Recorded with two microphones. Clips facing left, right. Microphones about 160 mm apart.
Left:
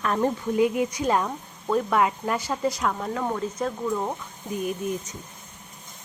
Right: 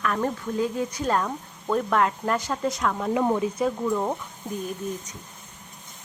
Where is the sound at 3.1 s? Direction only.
15° right (ahead or behind).